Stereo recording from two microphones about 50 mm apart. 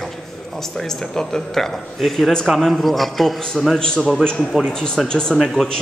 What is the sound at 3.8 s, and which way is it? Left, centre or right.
A man's voice, centre.